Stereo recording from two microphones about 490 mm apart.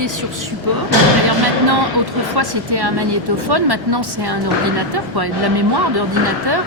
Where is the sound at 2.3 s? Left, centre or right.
Right.